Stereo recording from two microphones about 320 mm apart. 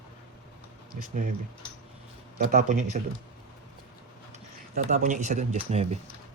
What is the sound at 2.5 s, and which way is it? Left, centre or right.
Speech, right.